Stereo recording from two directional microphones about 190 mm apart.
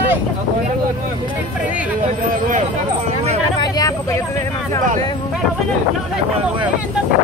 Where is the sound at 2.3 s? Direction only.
40° right (ahead or behind).